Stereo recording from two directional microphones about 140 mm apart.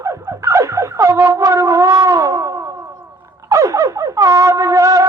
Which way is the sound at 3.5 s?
20° right (ahead or behind).